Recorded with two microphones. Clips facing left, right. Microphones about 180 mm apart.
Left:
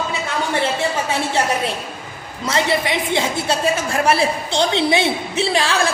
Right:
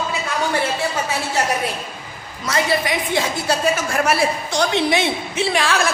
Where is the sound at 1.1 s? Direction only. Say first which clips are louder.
Left 2 dB; 25° left (ahead or behind).